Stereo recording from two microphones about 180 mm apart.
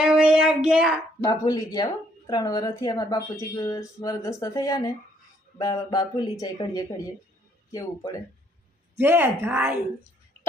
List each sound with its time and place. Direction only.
0.0 s child singing: 5° right (ahead or behind)
1.2 s speech: 15° left (ahead or behind)
9.0 s speech: 15° right (ahead or behind)